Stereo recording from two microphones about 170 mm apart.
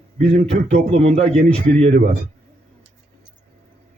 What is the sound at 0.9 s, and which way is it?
Speech, 40° right (ahead or behind).